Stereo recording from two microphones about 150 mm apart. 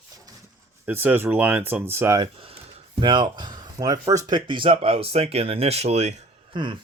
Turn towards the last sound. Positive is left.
turn(degrees=-35)  # may be behind; listen again after turning